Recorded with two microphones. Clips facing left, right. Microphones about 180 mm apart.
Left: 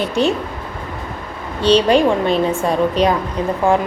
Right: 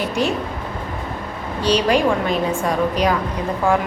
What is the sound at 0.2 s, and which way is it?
Speech, 30° left (ahead or behind).